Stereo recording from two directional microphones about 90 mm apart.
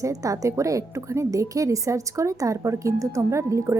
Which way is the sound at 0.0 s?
40° right (ahead or behind).